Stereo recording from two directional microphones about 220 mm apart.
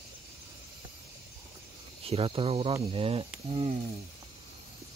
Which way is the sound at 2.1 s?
25° right (ahead or behind).